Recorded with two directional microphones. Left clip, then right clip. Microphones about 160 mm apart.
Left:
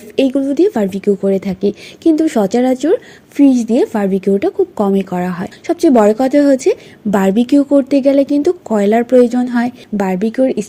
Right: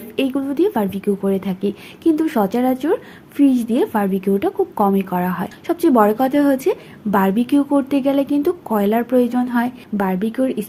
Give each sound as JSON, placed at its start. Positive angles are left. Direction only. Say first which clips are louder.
{"t": 0.2, "sound": "a woman's voice", "louder": "left 6 dB", "side_deg": 40}